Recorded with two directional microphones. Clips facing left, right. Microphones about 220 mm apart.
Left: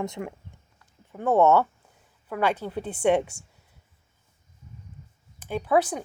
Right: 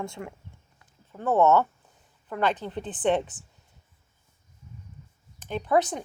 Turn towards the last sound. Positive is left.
turn(degrees=5)  # may be behind; listen again after turning